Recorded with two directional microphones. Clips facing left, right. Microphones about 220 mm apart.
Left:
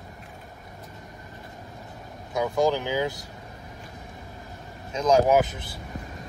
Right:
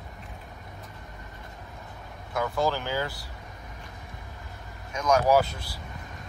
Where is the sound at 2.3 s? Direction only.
20° left (ahead or behind).